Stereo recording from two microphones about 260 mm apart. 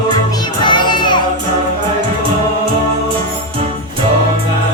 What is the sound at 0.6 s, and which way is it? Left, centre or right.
Music, centre.